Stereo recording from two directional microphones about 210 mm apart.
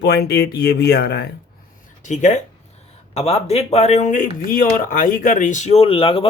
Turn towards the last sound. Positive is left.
turn(degrees=25)  # may be behind; listen again after turning